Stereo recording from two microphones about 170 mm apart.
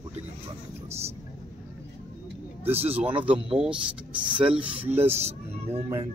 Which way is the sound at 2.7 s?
35° right (ahead or behind).